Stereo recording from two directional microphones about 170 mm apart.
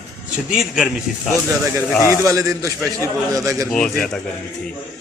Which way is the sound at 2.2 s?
20° right (ahead or behind).